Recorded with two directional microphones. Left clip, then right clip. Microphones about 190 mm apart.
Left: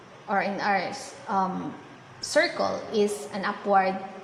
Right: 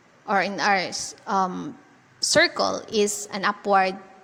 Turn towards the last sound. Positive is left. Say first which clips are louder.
# right 3 dB
turn(degrees=-40)  # may be behind; listen again after turning